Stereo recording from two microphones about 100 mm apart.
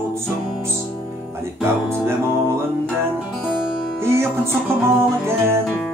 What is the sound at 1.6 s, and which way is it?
Music, 25° right (ahead or behind).